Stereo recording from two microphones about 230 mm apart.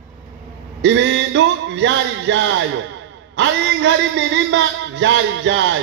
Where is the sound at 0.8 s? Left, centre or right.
Right.